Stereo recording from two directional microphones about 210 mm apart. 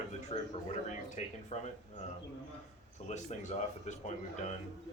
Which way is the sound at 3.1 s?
35° left (ahead or behind).